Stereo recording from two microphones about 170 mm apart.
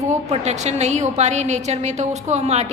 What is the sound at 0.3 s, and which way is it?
A woman's voice, 40° right (ahead or behind).